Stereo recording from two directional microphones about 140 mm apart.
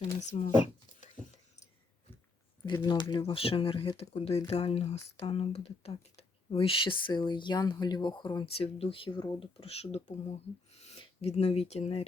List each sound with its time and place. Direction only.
0.0 s speech: 55° left (ahead or behind)
2.7 s speech: 30° left (ahead or behind)
8.5 s speech: 45° left (ahead or behind)